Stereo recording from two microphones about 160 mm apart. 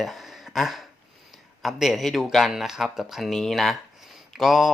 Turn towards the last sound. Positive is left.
turn(degrees=0)  # may be behind; listen again after turning